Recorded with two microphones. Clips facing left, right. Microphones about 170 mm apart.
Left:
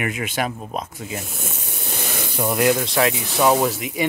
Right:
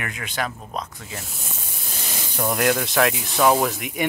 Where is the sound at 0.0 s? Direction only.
20° left (ahead or behind).